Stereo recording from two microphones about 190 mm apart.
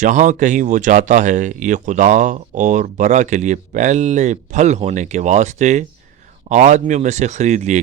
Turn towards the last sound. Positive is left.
turn(degrees=-40)  # may be behind; listen again after turning